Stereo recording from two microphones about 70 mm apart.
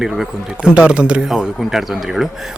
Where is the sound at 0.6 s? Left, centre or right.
Centre.